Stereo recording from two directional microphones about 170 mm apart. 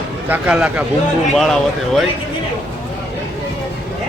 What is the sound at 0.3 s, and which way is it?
Speech, 10° right (ahead or behind).